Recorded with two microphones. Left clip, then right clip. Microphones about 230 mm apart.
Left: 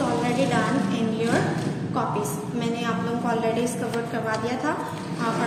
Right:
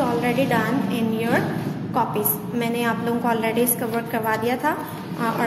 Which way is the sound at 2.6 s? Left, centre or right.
Right.